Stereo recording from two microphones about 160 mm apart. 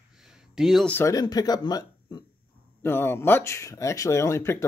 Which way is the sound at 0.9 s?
20° left (ahead or behind).